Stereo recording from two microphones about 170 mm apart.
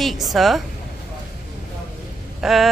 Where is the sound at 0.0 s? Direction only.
Centre (ahead or behind).